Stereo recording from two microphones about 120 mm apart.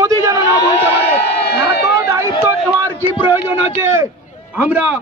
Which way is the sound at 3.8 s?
20° right (ahead or behind).